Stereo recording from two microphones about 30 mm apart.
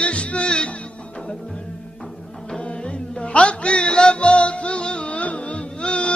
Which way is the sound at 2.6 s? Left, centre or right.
Left.